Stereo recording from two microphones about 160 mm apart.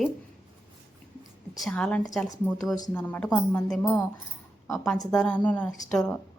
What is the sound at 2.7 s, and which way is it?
Speech, 25° left (ahead or behind).